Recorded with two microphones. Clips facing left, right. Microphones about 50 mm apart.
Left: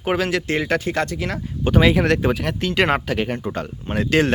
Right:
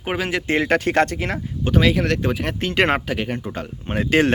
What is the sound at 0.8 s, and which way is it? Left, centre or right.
Speech, right.